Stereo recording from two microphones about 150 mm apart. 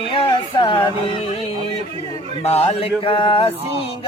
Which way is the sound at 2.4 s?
45° left (ahead or behind).